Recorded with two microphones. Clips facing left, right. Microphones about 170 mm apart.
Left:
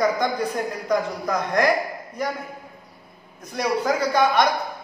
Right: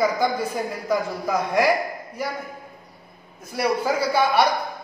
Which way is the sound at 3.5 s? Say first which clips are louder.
Even; 10° right (ahead or behind).